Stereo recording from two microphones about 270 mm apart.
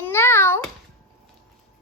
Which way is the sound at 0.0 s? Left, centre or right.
Centre.